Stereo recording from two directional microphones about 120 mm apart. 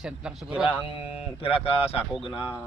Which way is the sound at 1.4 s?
55° left (ahead or behind).